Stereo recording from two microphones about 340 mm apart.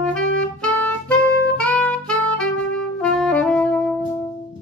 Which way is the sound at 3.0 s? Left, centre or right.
Centre.